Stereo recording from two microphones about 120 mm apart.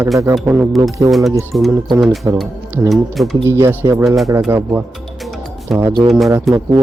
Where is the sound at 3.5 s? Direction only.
20° right (ahead or behind).